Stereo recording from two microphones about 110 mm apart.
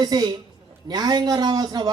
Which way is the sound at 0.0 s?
40° right (ahead or behind).